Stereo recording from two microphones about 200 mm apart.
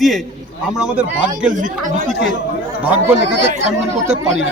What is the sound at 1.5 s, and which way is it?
Speech, 40° right (ahead or behind).